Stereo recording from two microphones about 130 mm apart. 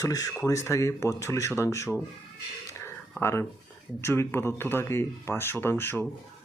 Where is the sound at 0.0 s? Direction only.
25° left (ahead or behind).